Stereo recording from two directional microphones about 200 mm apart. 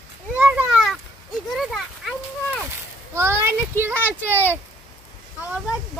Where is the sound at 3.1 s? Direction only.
10° right (ahead or behind).